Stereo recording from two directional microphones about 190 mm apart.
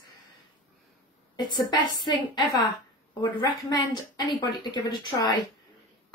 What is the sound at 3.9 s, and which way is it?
A woman's voice, 20° left (ahead or behind).